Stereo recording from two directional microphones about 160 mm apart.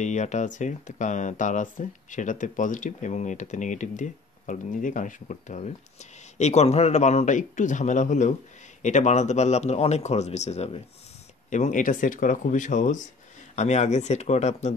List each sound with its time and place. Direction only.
0.0 s speech: 50° left (ahead or behind)